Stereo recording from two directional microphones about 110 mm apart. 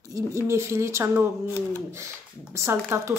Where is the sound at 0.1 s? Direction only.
25° right (ahead or behind).